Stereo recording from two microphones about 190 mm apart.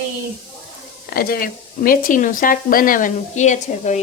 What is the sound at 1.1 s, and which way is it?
Speech, 55° left (ahead or behind).